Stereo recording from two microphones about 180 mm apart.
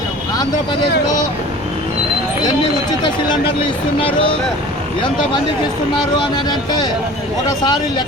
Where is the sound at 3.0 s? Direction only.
25° left (ahead or behind).